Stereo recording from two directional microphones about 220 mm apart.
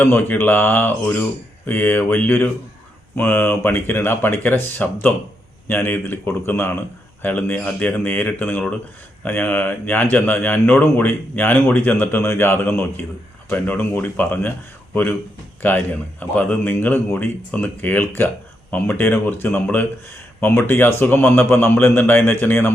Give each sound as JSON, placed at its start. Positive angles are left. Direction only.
{"t": 0.0, "sound": "speech", "side_deg": 10}
{"t": 16.2, "sound": "speech", "side_deg": 5}